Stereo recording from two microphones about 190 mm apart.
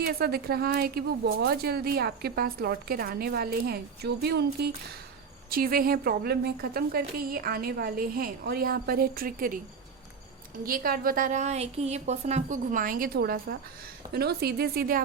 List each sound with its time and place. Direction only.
0.0 s a woman's voice: 55° right (ahead or behind)
10.7 s a woman's voice: 50° right (ahead or behind)